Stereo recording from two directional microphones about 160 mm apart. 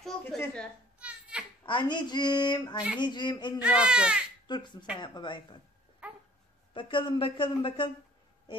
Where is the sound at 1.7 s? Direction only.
30° left (ahead or behind).